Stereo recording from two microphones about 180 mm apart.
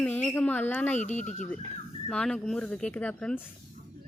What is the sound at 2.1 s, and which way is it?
Speech, 5° left (ahead or behind).